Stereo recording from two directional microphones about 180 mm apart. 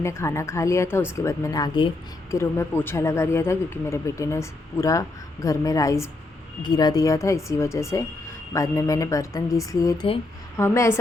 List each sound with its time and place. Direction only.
0.0 s speech: 15° left (ahead or behind)